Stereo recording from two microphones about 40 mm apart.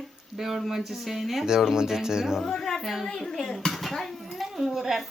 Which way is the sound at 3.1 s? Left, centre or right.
Centre.